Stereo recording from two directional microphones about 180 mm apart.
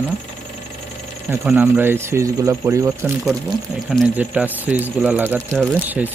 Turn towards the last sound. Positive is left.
turn(degrees=-10)  # may be behind; listen again after turning